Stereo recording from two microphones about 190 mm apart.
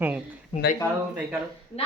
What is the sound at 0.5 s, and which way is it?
Speech, 30° left (ahead or behind).